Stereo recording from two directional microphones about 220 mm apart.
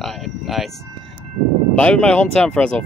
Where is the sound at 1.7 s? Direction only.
5° left (ahead or behind).